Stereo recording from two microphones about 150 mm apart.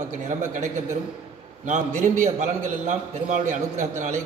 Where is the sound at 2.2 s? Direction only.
50° right (ahead or behind).